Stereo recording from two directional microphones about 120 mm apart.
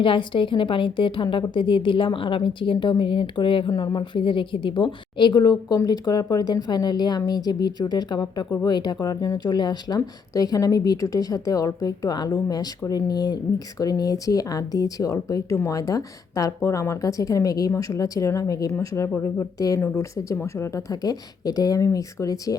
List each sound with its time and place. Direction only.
0.0 s a woman's voice: 45° left (ahead or behind); by 22.5 s 30° left (ahead or behind)